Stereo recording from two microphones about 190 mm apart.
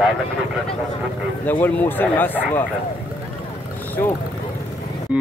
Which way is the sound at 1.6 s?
10° left (ahead or behind).